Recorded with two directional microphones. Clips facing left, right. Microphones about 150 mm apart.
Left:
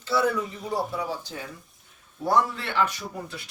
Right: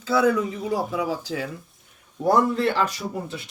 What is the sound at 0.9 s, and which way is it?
Speech, 90° right.